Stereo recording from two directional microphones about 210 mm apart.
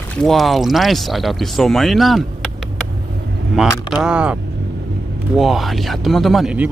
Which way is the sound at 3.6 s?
Centre (ahead or behind).